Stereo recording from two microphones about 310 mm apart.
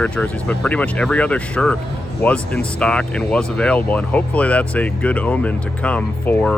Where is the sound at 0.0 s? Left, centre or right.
Centre.